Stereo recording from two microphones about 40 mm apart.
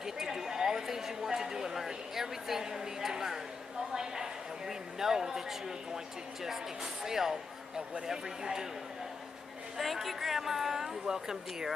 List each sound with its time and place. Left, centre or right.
0.0 s a sound: centre
6.4 s speech: centre
9.8 s speech: centre